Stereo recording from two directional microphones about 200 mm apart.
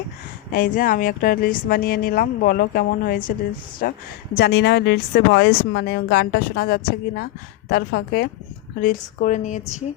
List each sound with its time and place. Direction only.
0.5 s a woman's voice: 45° left (ahead or behind)